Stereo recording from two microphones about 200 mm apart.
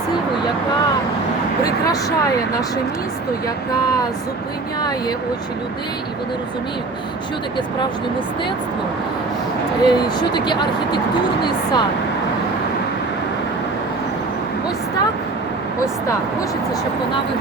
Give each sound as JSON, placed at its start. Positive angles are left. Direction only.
{"t": 4.8, "sound": "speech", "side_deg": 20}
{"t": 9.8, "sound": "speech", "side_deg": 20}